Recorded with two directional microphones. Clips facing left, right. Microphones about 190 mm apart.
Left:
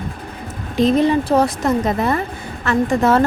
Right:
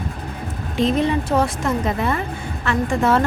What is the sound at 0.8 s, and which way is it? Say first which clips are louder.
A woman's voice: left 4 dB; 40° left (ahead or behind).